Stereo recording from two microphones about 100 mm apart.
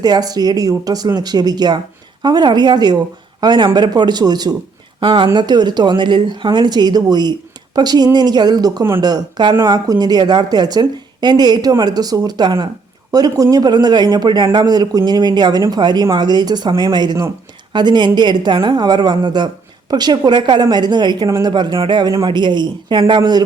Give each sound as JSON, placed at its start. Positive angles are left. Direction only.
{"t": 0.0, "sound": "a woman's voice", "side_deg": -40}
{"t": 4.9, "sound": "a woman's voice", "side_deg": -55}